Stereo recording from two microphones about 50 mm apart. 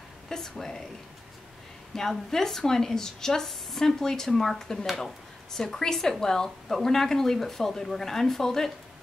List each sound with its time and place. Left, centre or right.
0.3 s speech: centre
2.0 s speech: centre